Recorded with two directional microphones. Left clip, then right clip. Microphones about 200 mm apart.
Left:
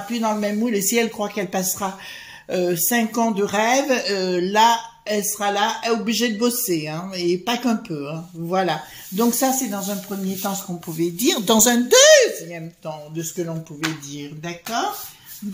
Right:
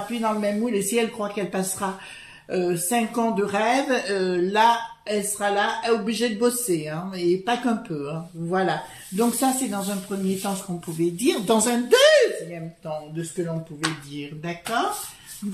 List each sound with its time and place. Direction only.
0.1 s speech: 45° left (ahead or behind)